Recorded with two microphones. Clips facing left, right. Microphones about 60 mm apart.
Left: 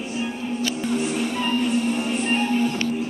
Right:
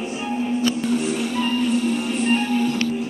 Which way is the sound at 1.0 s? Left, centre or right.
Centre.